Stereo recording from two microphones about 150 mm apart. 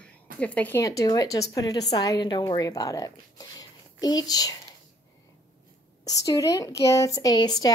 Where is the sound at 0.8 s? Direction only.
20° left (ahead or behind).